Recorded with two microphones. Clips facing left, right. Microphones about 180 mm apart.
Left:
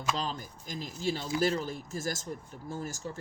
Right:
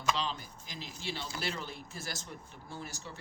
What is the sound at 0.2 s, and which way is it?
Speech, 45° left (ahead or behind).